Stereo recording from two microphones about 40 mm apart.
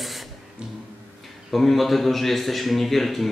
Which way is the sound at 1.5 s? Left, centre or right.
Centre.